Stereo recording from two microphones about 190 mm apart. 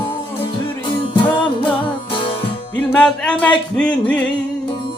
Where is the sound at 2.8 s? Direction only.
5° left (ahead or behind).